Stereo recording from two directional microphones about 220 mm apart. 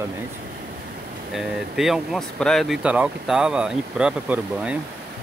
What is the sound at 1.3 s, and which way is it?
Speech, centre (ahead or behind).